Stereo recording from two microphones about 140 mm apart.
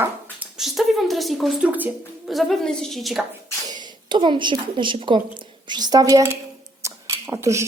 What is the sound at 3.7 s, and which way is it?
A woman's voice, 35° right (ahead or behind).